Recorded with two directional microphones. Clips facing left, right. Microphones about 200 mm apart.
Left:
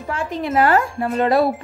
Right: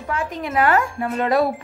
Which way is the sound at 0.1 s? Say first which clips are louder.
Left 2 dB; 30° left (ahead or behind).